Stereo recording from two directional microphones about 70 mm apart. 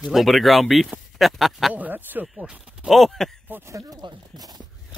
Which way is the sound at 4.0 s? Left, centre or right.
Right.